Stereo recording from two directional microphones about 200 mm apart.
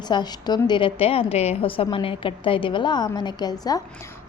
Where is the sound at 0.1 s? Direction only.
20° left (ahead or behind).